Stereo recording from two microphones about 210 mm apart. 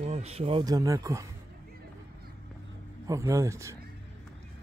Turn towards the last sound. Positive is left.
turn(degrees=-15)  # may be behind; listen again after turning